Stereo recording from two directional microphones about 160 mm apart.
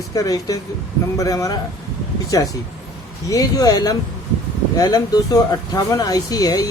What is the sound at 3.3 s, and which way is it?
Speech, 25° left (ahead or behind).